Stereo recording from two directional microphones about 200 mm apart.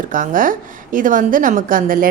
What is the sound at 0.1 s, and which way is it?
A woman's voice, 40° right (ahead or behind).